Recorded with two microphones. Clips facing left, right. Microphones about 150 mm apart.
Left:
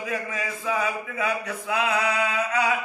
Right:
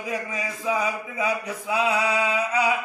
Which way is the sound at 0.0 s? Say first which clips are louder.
Even; 15° right (ahead or behind).